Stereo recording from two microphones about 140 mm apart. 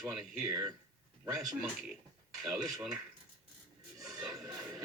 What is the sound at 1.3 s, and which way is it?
Speech, 5° right (ahead or behind).